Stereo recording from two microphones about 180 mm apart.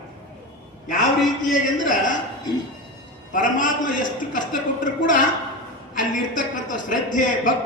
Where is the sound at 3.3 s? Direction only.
45° left (ahead or behind).